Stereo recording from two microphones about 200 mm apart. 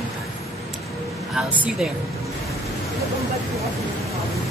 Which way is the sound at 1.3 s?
5° right (ahead or behind).